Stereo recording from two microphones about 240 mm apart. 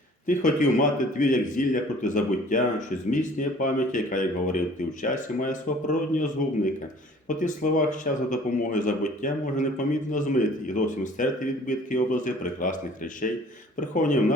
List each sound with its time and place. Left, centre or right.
0.3 s a man's voice: left
7.3 s a man's voice: left